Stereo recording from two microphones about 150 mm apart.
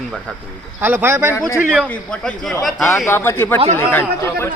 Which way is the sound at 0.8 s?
10° right (ahead or behind).